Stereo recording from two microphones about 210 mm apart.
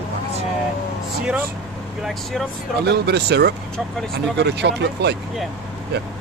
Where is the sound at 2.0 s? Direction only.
Centre (ahead or behind).